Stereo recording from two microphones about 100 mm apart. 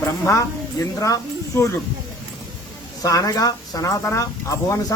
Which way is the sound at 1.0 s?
30° left (ahead or behind).